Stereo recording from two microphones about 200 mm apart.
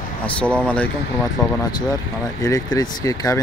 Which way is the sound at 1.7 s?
20° left (ahead or behind).